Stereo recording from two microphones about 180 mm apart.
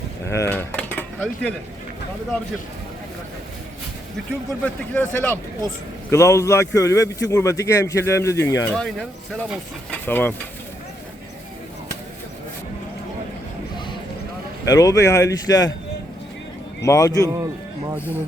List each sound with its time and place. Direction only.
0.3 s speech: 15° left (ahead or behind)
4.6 s a man's voice: 10° left (ahead or behind)
8.7 s speech: 5° left (ahead or behind)
9.9 s stir: 10° left (ahead or behind)
14.6 s a man's voice: 20° left (ahead or behind)
16.8 s a man's voice: 15° left (ahead or behind)
17.2 s speech: 20° right (ahead or behind)